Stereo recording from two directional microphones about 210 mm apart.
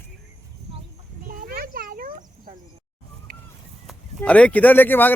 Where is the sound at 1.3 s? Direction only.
45° right (ahead or behind).